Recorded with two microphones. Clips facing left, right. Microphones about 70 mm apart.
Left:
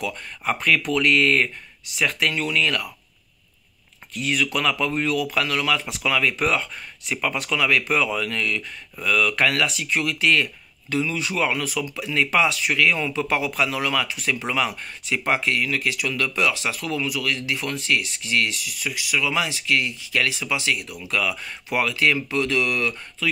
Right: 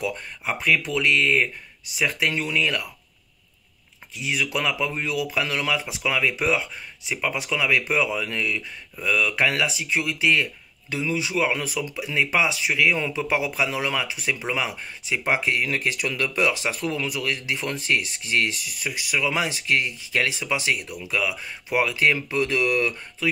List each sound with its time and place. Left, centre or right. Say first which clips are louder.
0.5 s speech: left 2 dB; centre
2.0 s speech: left 1 dB; centre
4.1 s speech: left 2 dB; centre